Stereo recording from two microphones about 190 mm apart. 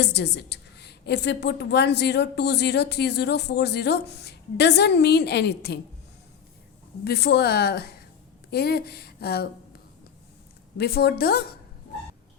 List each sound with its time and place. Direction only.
0.0 s a woman's voice: 60° left (ahead or behind)
7.0 s a woman's voice: 60° left (ahead or behind)
10.8 s a woman's voice: 55° left (ahead or behind)